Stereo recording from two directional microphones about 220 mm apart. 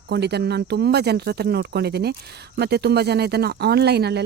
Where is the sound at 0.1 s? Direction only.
50° right (ahead or behind).